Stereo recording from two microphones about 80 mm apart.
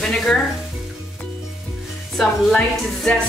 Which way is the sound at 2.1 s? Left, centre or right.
Centre.